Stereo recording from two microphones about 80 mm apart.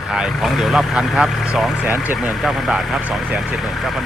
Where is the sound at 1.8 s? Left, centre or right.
Right.